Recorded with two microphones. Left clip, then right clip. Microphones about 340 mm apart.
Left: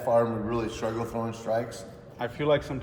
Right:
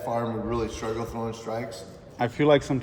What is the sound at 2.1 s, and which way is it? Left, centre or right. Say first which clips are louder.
Speech: right 5 dB; right.